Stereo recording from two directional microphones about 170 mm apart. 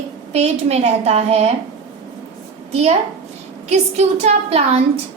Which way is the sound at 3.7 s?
40° right (ahead or behind).